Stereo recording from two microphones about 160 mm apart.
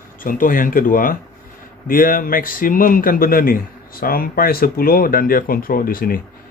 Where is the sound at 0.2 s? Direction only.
60° left (ahead or behind).